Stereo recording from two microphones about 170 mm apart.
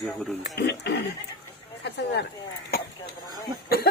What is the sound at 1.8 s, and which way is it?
Speech, 85° left.